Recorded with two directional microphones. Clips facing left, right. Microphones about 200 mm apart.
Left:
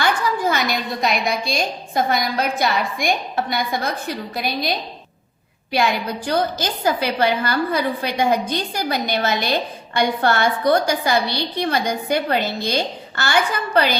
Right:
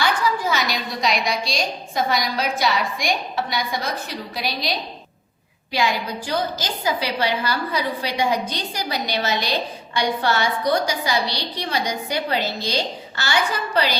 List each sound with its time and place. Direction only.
0.0 s a woman's voice: 50° left (ahead or behind)
5.7 s a woman's voice: 55° left (ahead or behind)